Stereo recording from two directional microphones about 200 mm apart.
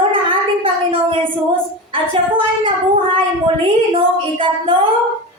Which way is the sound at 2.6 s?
25° right (ahead or behind).